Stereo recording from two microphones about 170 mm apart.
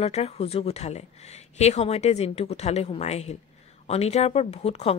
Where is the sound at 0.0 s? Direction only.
40° left (ahead or behind).